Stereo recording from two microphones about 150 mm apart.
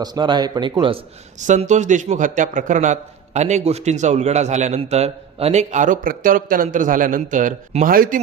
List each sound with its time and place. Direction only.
0.0 s speech: 30° right (ahead or behind)
1.4 s a man's voice: 55° right (ahead or behind)
7.9 s speech: 70° right (ahead or behind)